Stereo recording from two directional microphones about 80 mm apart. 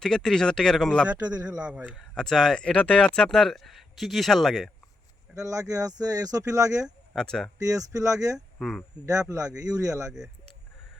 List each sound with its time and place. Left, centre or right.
0.0 s speech: centre
1.0 s a man's voice: centre
2.0 s speech: centre
5.3 s speech: right
7.2 s speech: centre
7.6 s speech: right
8.5 s speech: centre
9.0 s speech: right